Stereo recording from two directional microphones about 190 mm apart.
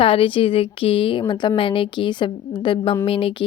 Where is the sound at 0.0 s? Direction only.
30° left (ahead or behind).